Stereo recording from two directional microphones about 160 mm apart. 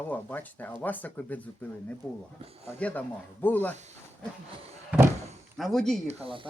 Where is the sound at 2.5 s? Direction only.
40° right (ahead or behind).